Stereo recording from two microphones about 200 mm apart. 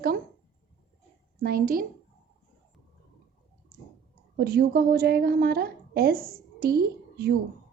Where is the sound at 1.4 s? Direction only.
50° right (ahead or behind).